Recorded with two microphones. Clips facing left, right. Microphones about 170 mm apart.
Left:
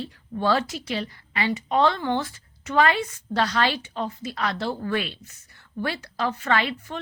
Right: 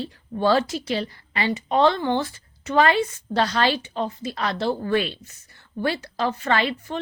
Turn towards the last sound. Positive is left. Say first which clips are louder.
# right 2 dB
turn(degrees=-30)  # may be behind; listen again after turning